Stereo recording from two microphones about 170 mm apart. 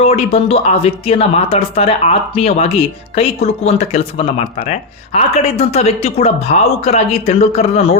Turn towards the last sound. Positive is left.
turn(degrees=40)  # may be behind; listen again after turning